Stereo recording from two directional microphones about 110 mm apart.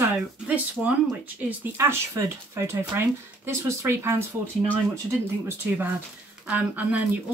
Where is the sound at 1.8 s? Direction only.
25° right (ahead or behind).